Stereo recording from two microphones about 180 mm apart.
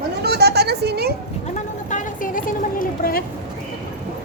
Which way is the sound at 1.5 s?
45° left (ahead or behind).